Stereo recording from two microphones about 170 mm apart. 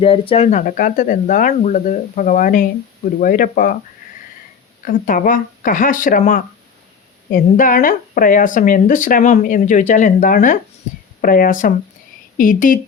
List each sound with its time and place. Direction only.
0.0 s speech: 35° left (ahead or behind); by 3.8 s 55° left (ahead or behind)
4.9 s speech: 55° left (ahead or behind)